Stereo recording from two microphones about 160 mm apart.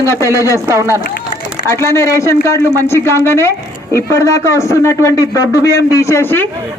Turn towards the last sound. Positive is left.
turn(degrees=15)  # may be behind; listen again after turning